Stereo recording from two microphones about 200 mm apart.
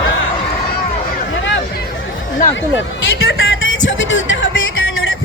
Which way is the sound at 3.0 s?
80° left.